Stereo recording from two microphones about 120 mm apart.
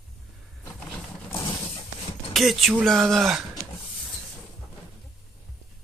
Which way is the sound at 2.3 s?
Centre (ahead or behind).